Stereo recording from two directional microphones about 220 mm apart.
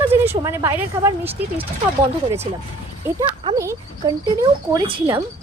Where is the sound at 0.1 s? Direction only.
10° right (ahead or behind).